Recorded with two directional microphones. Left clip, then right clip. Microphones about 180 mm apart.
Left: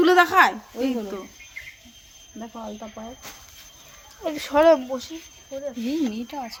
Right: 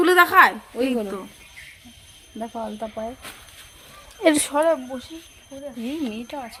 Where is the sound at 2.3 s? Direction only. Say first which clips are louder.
Right 6 dB; 60° right (ahead or behind).